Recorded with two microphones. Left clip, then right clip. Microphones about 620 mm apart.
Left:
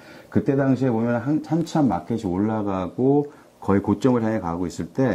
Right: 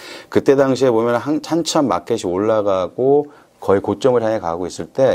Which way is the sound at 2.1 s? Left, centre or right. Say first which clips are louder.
Right 9 dB; right.